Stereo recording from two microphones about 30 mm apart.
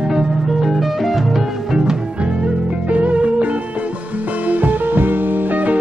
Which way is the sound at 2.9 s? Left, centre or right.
Right.